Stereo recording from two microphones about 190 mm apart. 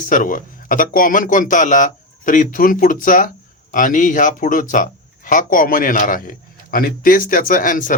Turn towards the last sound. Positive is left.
turn(degrees=45)  # may be behind; listen again after turning